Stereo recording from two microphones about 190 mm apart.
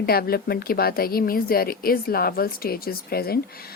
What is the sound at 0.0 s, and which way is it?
Speech, 55° left (ahead or behind).